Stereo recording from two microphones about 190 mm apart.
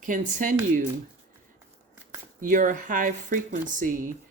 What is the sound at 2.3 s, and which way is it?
Speech, 45° right (ahead or behind).